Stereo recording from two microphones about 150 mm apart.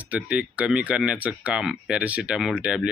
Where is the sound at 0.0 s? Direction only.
10° right (ahead or behind).